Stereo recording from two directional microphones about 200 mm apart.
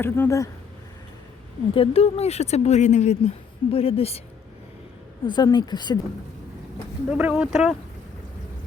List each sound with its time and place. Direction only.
0.0 s a woman's voice: 15° left (ahead or behind)
1.7 s speech: 30° left (ahead or behind)
5.2 s speech: 20° left (ahead or behind)
7.1 s speech: 5° right (ahead or behind)